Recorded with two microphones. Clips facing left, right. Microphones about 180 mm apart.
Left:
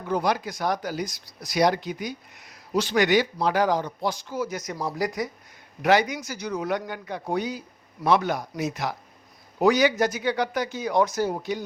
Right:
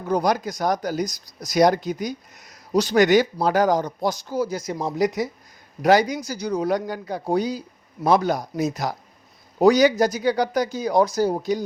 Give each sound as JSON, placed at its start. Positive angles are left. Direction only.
{"t": 0.0, "sound": "speech", "side_deg": -40}
{"t": 5.8, "sound": "speech", "side_deg": -35}